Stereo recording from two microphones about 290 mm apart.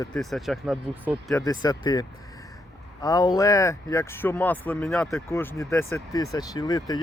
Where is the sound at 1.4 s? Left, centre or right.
Centre.